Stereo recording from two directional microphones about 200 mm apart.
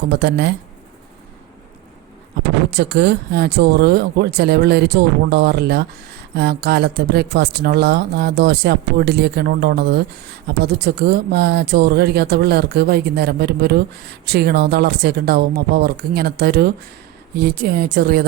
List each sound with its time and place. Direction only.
0.2 s speech: 55° right (ahead or behind)
2.6 s speech: 55° right (ahead or behind)